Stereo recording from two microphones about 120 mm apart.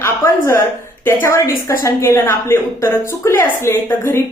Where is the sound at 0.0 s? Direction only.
20° left (ahead or behind).